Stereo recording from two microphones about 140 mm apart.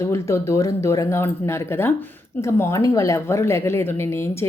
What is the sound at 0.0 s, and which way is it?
A woman's voice, 20° left (ahead or behind).